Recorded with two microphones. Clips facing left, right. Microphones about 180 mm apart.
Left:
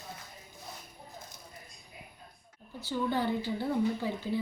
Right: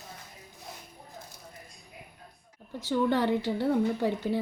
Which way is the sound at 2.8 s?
85° right.